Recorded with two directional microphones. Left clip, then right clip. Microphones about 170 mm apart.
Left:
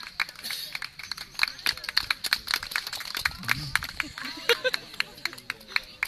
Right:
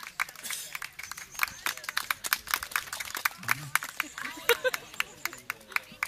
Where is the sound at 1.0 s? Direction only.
50° right (ahead or behind).